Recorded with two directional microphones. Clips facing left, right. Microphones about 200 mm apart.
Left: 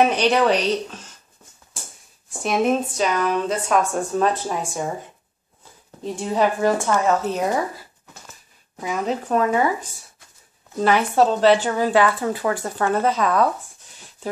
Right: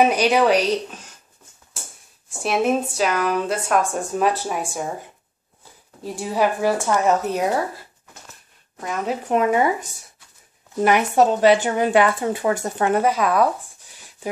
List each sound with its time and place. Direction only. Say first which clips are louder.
0.0 s a woman's voice: right 1 dB; 10° right (ahead or behind)
2.4 s a woman's voice: even; 5° right (ahead or behind)
6.0 s a woman's voice: left 1 dB; 5° right (ahead or behind)
8.8 s a woman's voice: left 1 dB; centre (ahead or behind)
9.3 s a woman's voice: right 2 dB; 20° right (ahead or behind)
10.8 s a woman's voice: right 1 dB; 15° right (ahead or behind)